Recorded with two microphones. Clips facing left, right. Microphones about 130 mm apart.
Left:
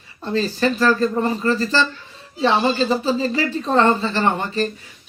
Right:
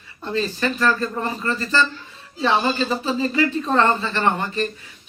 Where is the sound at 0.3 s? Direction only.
35° left (ahead or behind).